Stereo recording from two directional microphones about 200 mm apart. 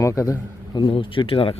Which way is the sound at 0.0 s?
15° left (ahead or behind).